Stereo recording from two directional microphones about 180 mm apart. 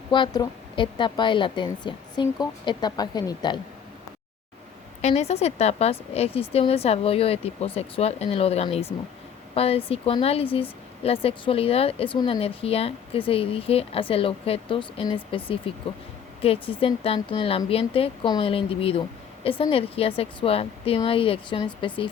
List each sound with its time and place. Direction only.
0.1 s a woman's voice: 25° left (ahead or behind)
5.0 s speech: 35° left (ahead or behind)